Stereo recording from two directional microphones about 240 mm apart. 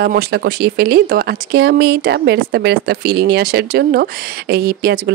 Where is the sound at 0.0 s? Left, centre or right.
Right.